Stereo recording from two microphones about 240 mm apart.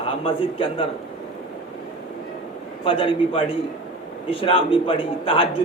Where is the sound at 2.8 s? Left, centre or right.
Left.